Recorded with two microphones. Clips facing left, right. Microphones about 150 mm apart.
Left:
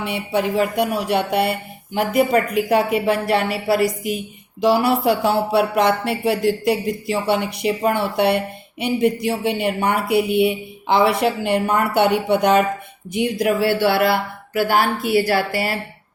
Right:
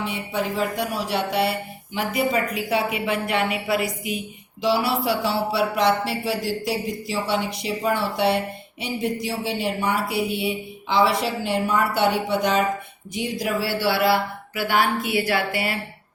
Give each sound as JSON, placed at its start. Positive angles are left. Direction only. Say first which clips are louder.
{"t": 0.0, "sound": "speech", "louder": "left 5 dB", "side_deg": 65}